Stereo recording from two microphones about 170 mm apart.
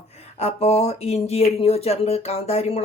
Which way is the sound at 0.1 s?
40° left (ahead or behind).